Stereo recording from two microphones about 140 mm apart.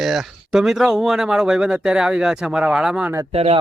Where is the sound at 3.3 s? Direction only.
45° right (ahead or behind).